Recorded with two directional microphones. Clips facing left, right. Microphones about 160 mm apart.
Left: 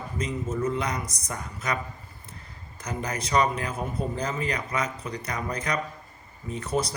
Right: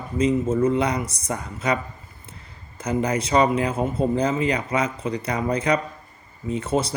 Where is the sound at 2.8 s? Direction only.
30° right (ahead or behind).